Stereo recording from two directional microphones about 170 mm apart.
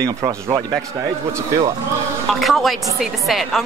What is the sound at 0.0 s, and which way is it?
Speech, 20° right (ahead or behind).